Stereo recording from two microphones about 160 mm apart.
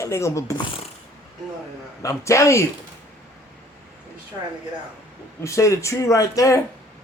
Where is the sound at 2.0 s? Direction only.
20° left (ahead or behind).